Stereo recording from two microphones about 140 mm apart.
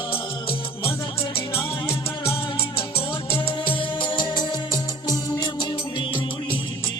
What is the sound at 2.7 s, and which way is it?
Music, 40° left (ahead or behind).